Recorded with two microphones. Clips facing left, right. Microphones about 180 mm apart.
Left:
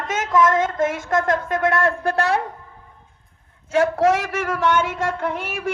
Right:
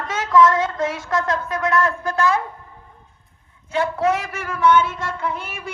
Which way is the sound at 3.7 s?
85° left.